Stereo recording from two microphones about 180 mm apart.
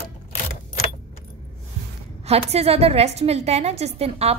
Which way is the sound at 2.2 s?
35° right (ahead or behind).